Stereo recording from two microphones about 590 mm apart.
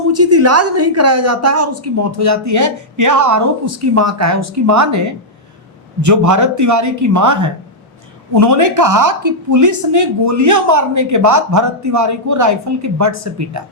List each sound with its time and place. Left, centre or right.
0.1 s a woman's voice: right